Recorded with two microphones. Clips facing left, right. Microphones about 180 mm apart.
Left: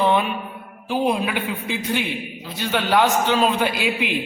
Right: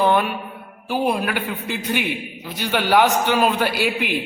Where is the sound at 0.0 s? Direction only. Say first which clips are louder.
Right 1 dB; 5° right (ahead or behind).